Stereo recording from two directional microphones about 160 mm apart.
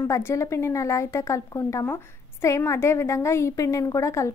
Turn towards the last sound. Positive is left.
turn(degrees=20)  # may be behind; listen again after turning